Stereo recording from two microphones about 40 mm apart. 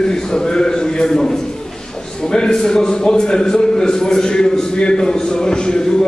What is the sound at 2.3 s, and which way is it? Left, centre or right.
A man's voice, centre.